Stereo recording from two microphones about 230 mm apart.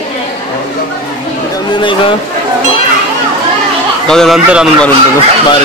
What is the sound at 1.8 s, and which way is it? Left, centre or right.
Speech, left.